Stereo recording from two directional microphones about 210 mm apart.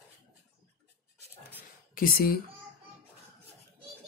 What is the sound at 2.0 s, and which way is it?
Speech, 45° left (ahead or behind).